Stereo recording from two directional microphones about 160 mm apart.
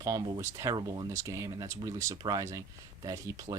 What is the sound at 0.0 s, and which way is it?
Speech, 20° right (ahead or behind).